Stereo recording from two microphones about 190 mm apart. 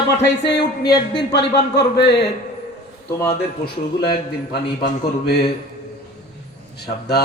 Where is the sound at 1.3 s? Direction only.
60° left (ahead or behind).